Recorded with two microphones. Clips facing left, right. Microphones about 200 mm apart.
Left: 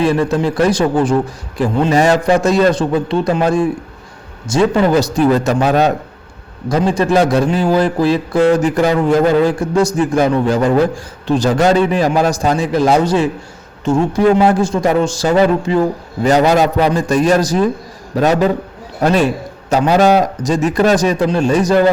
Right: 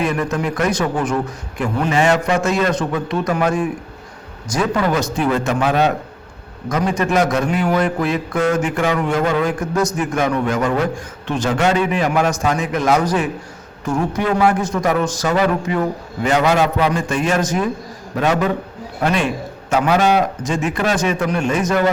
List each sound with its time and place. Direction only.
0.0 s a man's voice: 30° left (ahead or behind)